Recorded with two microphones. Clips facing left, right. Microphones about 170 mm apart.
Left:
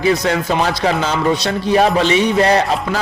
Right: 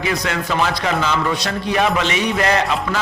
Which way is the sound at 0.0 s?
35° left (ahead or behind).